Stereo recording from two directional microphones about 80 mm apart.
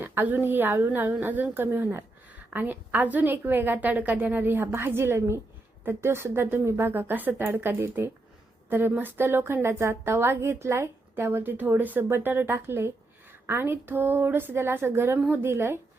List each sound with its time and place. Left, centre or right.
0.0 s a woman's voice: right